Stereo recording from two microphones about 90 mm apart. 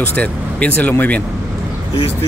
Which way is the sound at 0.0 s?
15° left (ahead or behind).